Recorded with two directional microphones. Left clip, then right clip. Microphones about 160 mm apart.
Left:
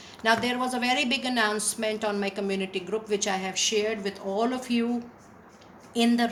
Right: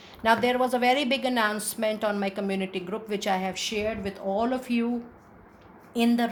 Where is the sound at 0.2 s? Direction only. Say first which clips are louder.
Right 2 dB; 45° right (ahead or behind).